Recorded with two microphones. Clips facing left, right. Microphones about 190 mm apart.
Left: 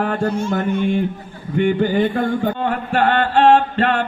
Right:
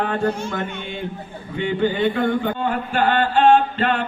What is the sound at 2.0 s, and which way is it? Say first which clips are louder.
Speech: left 2 dB; 50° left (ahead or behind).